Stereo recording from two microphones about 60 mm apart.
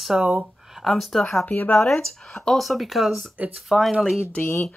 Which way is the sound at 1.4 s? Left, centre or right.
Left.